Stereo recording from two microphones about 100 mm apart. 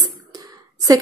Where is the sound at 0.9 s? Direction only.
35° right (ahead or behind).